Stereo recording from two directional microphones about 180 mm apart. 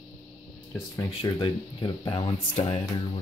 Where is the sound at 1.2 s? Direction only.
25° left (ahead or behind).